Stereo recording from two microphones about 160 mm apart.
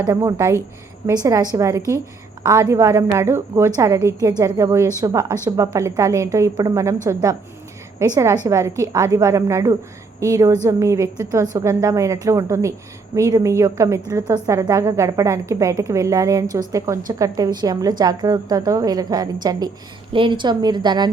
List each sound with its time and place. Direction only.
0.0 s a woman's voice: 25° right (ahead or behind)